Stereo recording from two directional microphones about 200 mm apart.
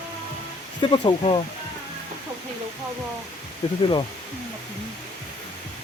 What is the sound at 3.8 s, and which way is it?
Speech, 25° left (ahead or behind).